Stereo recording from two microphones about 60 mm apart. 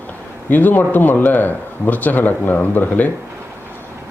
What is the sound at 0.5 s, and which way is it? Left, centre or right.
Speech, left.